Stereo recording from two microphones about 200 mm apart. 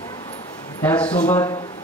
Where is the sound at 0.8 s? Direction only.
5° left (ahead or behind).